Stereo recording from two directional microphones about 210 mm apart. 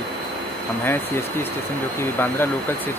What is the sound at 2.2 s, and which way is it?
Speech, 10° left (ahead or behind).